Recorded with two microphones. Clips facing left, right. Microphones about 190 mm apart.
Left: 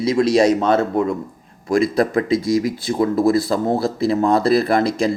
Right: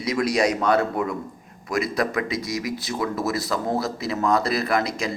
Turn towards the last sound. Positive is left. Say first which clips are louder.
# left 7 dB
turn(degrees=30)  # may be behind; listen again after turning